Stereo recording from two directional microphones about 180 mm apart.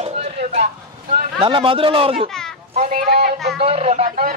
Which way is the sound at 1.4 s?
30° right (ahead or behind).